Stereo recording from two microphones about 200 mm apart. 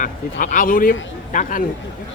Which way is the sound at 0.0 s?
40° left (ahead or behind).